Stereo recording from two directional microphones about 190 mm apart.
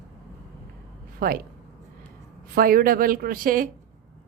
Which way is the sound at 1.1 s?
50° right (ahead or behind).